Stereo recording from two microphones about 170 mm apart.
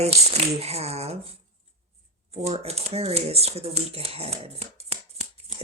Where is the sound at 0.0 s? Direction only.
40° right (ahead or behind).